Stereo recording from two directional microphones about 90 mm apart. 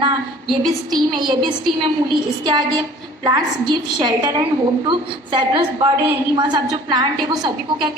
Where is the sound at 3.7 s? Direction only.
50° right (ahead or behind).